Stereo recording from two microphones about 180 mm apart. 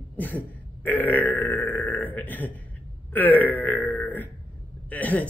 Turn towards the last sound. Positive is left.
turn(degrees=10)  # may be behind; listen again after turning